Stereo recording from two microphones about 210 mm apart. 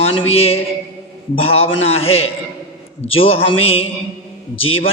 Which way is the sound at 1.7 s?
65° left (ahead or behind).